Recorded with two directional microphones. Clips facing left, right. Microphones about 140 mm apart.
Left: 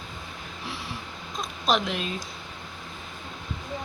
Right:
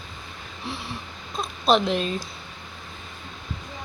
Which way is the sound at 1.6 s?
30° right (ahead or behind).